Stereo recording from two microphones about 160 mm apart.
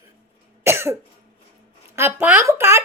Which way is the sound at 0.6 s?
15° right (ahead or behind).